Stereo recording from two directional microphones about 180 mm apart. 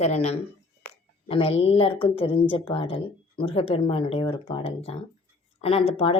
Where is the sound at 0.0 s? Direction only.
40° left (ahead or behind).